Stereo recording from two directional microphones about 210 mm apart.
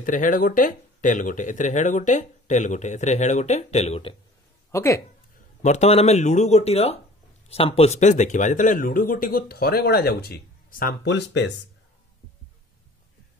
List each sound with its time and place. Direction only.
0.0 s speech: 40° left (ahead or behind)
4.6 s speech: 15° left (ahead or behind)
5.6 s speech: 35° left (ahead or behind); by 11.5 s 55° left (ahead or behind)